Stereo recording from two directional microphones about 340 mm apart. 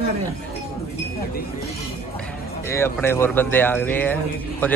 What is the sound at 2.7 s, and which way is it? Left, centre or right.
Speech, centre.